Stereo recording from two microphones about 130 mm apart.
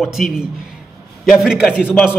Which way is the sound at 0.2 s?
5° left (ahead or behind).